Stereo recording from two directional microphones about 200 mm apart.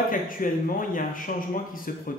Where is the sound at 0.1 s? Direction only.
45° left (ahead or behind).